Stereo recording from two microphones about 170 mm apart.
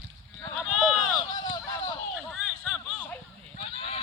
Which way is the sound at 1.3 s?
25° left (ahead or behind).